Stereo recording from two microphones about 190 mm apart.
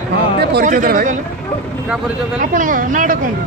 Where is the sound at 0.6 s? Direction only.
45° right (ahead or behind).